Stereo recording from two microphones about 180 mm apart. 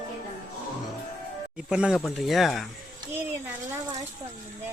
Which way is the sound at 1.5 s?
5° right (ahead or behind).